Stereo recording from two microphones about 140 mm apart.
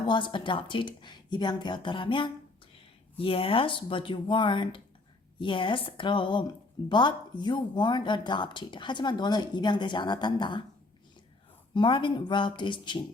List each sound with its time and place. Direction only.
0.1 s speech: 35° left (ahead or behind)
11.7 s speech: 35° left (ahead or behind)